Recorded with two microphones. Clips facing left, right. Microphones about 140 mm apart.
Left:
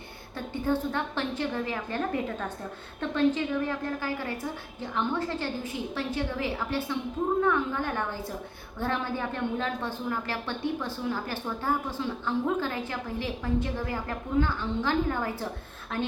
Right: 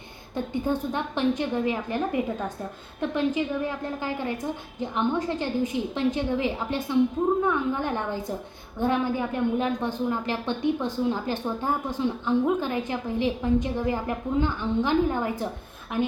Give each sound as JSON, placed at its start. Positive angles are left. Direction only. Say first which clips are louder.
{"t": 0.3, "sound": "a woman's voice", "louder": "right 2 dB", "side_deg": -15}